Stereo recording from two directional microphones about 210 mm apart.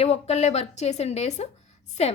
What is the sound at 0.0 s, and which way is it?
A woman's voice, 30° left (ahead or behind).